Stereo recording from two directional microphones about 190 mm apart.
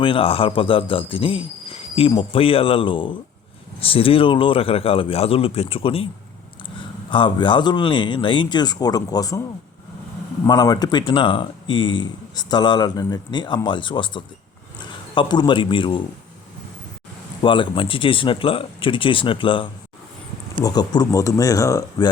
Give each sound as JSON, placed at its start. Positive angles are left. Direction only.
{"t": 0.0, "sound": "speech", "side_deg": 30}
{"t": 7.1, "sound": "speech", "side_deg": 25}
{"t": 10.4, "sound": "a man's voice", "side_deg": 20}
{"t": 17.4, "sound": "speech", "side_deg": 25}